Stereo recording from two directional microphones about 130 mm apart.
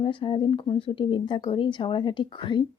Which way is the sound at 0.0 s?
40° left (ahead or behind).